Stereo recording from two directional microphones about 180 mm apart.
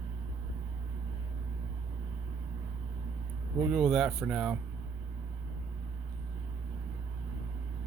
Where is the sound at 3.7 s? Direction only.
5° right (ahead or behind).